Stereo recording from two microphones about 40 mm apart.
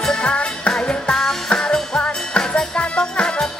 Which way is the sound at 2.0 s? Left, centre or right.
Left.